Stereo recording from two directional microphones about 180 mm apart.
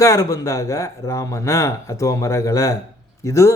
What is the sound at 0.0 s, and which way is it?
A man's voice, 20° left (ahead or behind).